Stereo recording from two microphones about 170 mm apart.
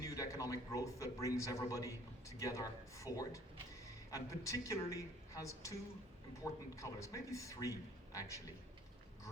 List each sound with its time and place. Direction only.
0.0 s a man's voice: 20° left (ahead or behind)